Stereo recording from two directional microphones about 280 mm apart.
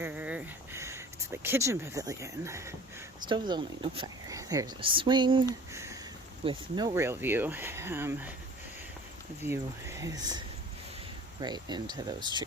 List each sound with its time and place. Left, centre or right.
0.0 s speech: centre
5.7 s a sound: centre
6.4 s speech: centre
9.4 s speech: centre